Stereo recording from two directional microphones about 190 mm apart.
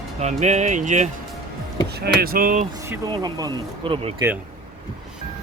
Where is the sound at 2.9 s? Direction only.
20° right (ahead or behind).